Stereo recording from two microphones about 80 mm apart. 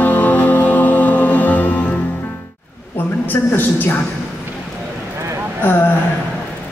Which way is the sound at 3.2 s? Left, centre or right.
Left.